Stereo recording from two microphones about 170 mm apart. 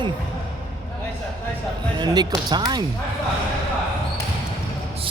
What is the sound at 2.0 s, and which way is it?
Speech, 25° right (ahead or behind).